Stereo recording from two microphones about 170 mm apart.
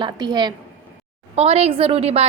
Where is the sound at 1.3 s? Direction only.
35° right (ahead or behind).